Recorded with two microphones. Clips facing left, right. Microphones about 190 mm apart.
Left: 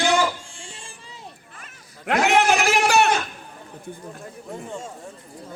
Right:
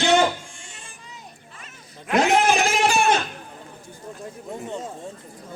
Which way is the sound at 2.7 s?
70° left (ahead or behind).